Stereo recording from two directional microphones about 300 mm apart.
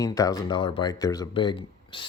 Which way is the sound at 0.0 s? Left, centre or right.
Centre.